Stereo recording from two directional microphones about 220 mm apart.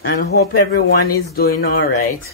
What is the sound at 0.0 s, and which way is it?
Speech, 45° left (ahead or behind).